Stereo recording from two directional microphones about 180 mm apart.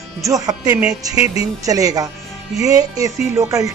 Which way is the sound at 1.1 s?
35° left (ahead or behind).